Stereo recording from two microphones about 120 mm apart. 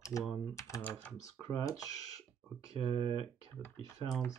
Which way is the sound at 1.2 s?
30° left (ahead or behind).